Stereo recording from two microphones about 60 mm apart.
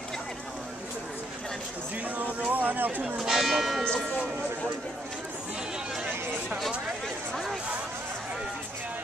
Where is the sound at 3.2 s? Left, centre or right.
Centre.